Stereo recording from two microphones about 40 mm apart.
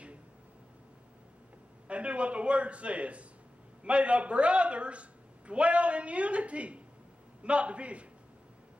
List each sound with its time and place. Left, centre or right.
1.9 s a man's voice: right